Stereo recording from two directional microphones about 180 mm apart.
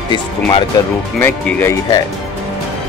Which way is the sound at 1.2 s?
10° left (ahead or behind).